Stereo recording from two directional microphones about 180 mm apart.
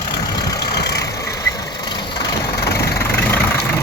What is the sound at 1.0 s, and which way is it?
Vehicle, 20° left (ahead or behind).